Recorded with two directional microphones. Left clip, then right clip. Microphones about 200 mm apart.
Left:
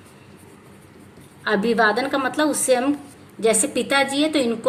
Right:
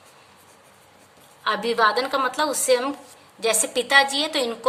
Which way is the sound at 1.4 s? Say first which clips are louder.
Left 1 dB; 55° right (ahead or behind).